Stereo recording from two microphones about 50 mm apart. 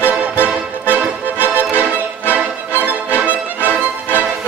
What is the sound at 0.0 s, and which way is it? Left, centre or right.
Music, right.